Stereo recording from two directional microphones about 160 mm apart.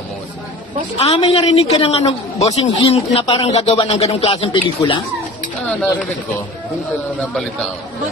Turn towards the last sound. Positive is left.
turn(degrees=5)  # may be behind; listen again after turning